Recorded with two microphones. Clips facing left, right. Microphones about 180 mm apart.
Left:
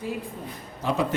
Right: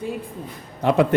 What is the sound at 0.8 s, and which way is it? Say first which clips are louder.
Speech: right 7 dB; 60° right (ahead or behind).